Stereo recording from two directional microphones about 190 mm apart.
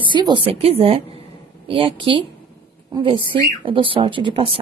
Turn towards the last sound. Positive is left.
turn(degrees=-30)  # may be behind; listen again after turning